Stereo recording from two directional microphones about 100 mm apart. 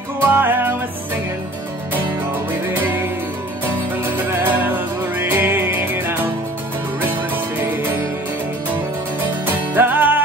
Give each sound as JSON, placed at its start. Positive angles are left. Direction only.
{"t": 0.2, "sound": "music", "side_deg": -20}
{"t": 2.7, "sound": "music", "side_deg": -20}
{"t": 4.3, "sound": "music", "side_deg": -20}
{"t": 9.5, "sound": "music", "side_deg": -20}